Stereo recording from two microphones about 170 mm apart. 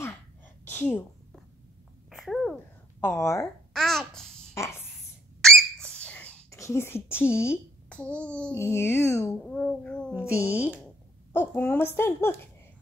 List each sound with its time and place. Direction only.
0.7 s a woman's voice: 10° left (ahead or behind)
2.0 s a sound: centre (ahead or behind)
3.0 s a woman's voice: 15° left (ahead or behind)
3.7 s babbling: 5° left (ahead or behind)
4.6 s a sound: 15° left (ahead or behind)
5.4 s speech: 5° left (ahead or behind)
9.4 s speech: centre (ahead or behind)
10.3 s speech: 10° right (ahead or behind)
11.3 s a woman's voice: 10° left (ahead or behind)